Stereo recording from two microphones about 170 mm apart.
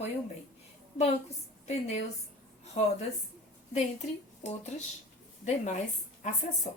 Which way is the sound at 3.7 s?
40° left (ahead or behind).